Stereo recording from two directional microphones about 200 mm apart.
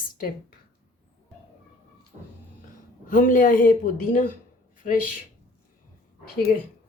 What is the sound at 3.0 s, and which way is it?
A woman's voice, 40° left (ahead or behind).